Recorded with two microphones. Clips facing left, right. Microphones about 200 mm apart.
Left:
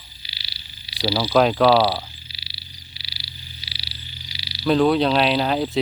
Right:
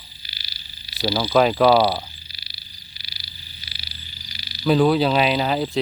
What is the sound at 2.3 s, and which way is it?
Frog, 45° right (ahead or behind).